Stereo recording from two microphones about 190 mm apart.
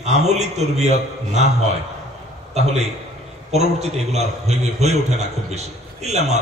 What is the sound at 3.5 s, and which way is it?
A man's voice, 35° right (ahead or behind).